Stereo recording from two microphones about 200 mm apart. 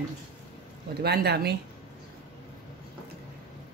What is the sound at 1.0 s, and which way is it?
Speech, 55° right (ahead or behind).